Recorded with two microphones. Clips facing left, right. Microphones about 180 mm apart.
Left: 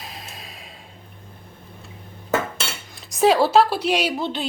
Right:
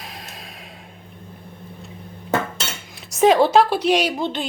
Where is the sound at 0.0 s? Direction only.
Centre (ahead or behind).